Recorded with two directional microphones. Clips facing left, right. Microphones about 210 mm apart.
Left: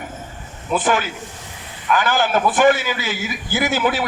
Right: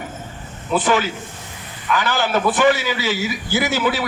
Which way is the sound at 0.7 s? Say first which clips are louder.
Right 1 dB; 50° left (ahead or behind).